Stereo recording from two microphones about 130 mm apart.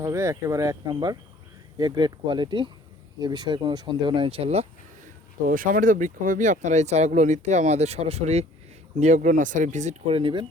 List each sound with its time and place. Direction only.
0.0 s speech: 25° right (ahead or behind); by 4.6 s 50° right (ahead or behind)
5.5 s speech: 90° right; by 8.4 s 55° right (ahead or behind)
9.0 s speech: 70° right (ahead or behind); by 10.4 s 45° right (ahead or behind)